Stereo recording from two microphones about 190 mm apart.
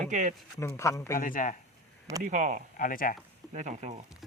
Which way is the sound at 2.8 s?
45° left (ahead or behind).